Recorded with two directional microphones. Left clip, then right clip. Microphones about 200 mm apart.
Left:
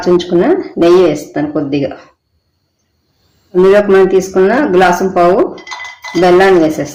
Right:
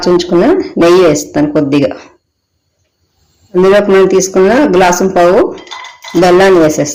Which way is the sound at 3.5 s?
25° right (ahead or behind).